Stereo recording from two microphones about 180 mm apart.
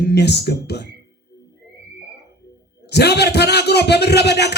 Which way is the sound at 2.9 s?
65° left (ahead or behind).